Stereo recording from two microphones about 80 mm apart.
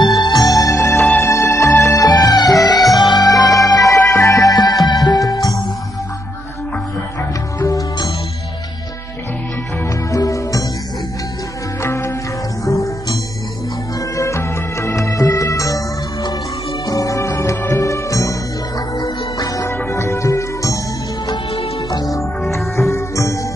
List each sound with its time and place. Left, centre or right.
0.2 s music: left
2.0 s music: left
4.0 s music: left
10.1 s music: left
11.8 s music: left
22.5 s music: left